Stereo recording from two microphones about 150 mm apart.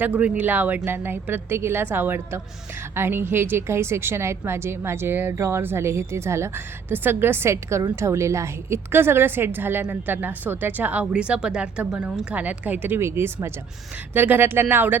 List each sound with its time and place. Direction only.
0.0 s a woman's voice: 10° right (ahead or behind)